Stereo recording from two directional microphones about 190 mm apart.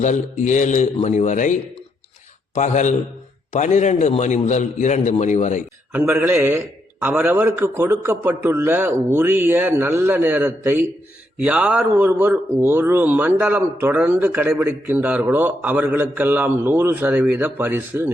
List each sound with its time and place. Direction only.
0.0 s a man's voice: 40° left (ahead or behind)
2.6 s a man's voice: 40° left (ahead or behind)
5.9 s a man's voice: 10° right (ahead or behind)